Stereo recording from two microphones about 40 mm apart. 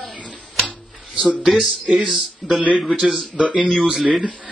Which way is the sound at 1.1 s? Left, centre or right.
Right.